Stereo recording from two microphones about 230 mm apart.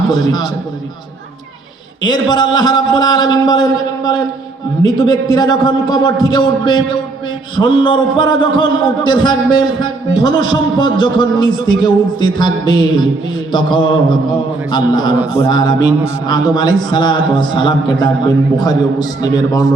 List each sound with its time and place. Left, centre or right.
0.1 s a man's voice: centre
2.0 s a man's voice: centre
15.4 s mantra: right
16.2 s a man's voice: centre